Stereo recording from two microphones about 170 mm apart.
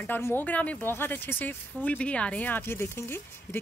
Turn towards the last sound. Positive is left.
turn(degrees=15)  # may be behind; listen again after turning